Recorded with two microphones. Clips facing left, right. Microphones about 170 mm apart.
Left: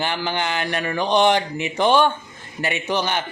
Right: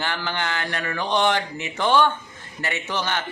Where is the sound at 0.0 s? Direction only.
15° left (ahead or behind).